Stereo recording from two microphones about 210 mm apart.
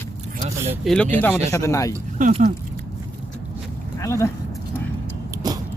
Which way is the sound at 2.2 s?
35° right (ahead or behind).